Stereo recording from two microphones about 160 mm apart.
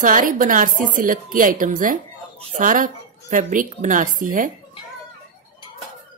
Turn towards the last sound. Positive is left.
turn(degrees=-55)  # may be behind; listen again after turning